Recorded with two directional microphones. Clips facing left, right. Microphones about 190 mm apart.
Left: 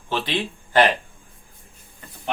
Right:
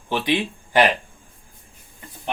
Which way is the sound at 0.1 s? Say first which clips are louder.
Right 3 dB; 15° right (ahead or behind).